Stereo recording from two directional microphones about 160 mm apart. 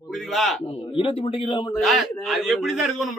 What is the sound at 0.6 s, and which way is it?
Speech, 35° left (ahead or behind).